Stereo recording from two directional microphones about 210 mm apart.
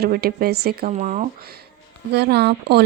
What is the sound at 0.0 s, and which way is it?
Speech, 45° right (ahead or behind).